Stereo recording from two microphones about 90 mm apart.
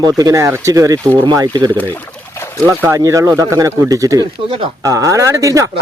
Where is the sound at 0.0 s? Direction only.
40° right (ahead or behind).